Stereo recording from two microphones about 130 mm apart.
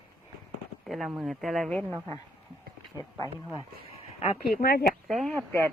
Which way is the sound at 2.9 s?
25° left (ahead or behind).